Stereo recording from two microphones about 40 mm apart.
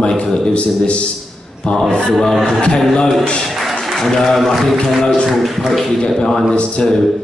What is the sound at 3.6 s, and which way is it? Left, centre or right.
Applause, centre.